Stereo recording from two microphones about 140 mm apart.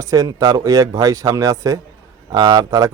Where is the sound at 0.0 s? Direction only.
25° right (ahead or behind).